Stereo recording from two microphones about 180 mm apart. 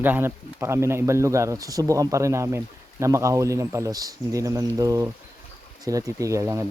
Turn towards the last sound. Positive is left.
turn(degrees=-15)  # may be behind; listen again after turning